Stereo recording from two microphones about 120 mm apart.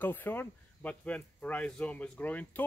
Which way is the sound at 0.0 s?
15° left (ahead or behind).